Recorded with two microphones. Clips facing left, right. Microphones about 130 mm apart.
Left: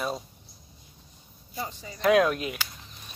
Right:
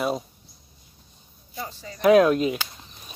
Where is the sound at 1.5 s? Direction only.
20° left (ahead or behind).